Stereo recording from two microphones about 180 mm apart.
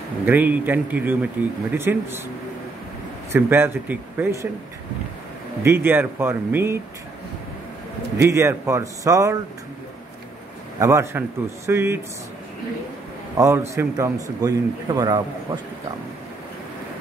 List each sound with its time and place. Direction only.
0.2 s speech: 10° right (ahead or behind)
3.3 s speech: 10° right (ahead or behind)
5.6 s speech: 15° right (ahead or behind)
8.2 s speech: 15° right (ahead or behind)
10.8 s speech: 15° right (ahead or behind)
13.4 s a man's voice: 15° right (ahead or behind)